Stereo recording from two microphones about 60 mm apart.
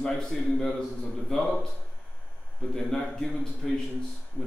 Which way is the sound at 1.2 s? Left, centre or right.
Centre.